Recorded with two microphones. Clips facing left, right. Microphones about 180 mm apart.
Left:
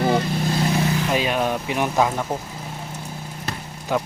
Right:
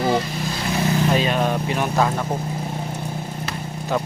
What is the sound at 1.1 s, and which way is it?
Speech, 10° left (ahead or behind).